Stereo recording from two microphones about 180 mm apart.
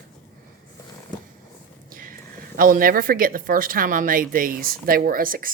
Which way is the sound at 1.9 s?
50° right (ahead or behind).